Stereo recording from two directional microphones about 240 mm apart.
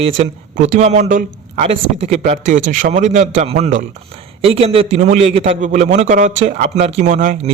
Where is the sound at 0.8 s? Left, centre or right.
Right.